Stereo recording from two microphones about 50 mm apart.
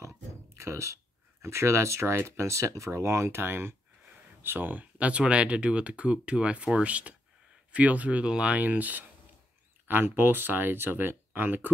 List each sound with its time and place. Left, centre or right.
0.6 s speech: right
1.4 s speech: right
8.5 s speech: right